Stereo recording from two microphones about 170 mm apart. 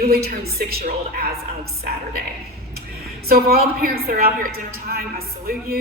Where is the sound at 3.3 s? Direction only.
65° right (ahead or behind).